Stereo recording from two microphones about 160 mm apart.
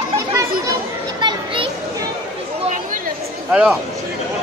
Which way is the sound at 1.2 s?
30° right (ahead or behind).